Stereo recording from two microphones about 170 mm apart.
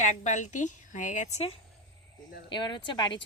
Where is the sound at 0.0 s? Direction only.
45° left (ahead or behind).